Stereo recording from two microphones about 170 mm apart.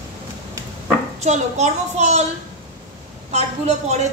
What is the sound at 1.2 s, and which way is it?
A woman's voice, 40° right (ahead or behind).